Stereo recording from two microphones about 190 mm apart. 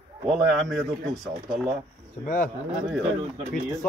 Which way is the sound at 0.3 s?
Centre (ahead or behind).